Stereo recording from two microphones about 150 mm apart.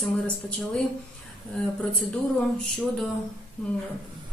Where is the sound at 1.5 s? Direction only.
5° left (ahead or behind).